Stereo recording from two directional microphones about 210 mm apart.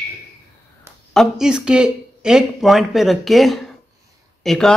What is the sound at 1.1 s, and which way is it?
Speech, centre (ahead or behind).